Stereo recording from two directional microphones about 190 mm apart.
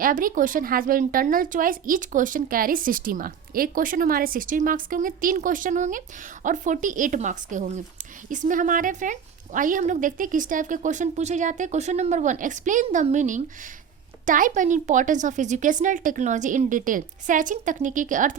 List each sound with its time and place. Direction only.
0.0 s a woman's voice: 45° right (ahead or behind)